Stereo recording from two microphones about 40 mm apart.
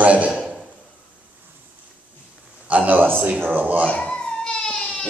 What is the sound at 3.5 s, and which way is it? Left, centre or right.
Speech, right.